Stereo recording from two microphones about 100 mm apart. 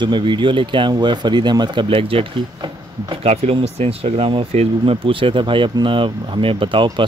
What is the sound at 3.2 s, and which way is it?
Speech, 90° right.